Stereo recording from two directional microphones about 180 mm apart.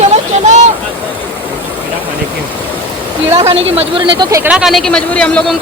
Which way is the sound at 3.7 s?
25° right (ahead or behind).